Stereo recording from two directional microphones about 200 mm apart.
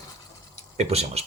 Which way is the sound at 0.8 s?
30° right (ahead or behind).